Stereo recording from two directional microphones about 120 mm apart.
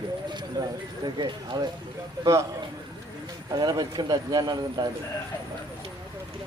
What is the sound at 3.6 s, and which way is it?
Speech, 35° right (ahead or behind).